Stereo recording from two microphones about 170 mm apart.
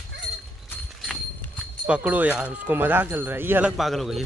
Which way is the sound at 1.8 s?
10° right (ahead or behind).